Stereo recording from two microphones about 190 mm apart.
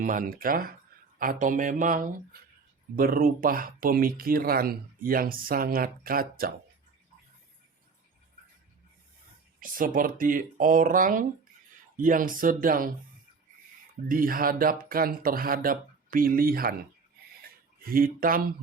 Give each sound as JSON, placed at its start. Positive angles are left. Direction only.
{"t": 0.0, "sound": "speech", "side_deg": -45}
{"t": 9.6, "sound": "speech", "side_deg": -45}
{"t": 14.1, "sound": "speech", "side_deg": -50}
{"t": 17.8, "sound": "speech", "side_deg": -50}